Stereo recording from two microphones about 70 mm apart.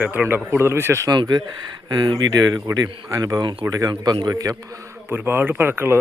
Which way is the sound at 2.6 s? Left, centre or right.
Right.